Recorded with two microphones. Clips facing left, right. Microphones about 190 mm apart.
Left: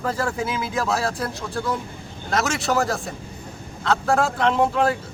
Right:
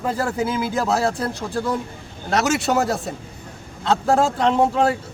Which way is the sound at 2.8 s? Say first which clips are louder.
Right 2 dB; 25° right (ahead or behind).